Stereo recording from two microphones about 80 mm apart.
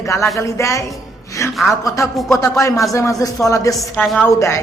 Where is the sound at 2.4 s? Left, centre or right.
Left.